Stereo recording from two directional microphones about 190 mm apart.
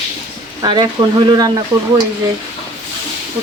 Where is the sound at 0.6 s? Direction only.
25° right (ahead or behind).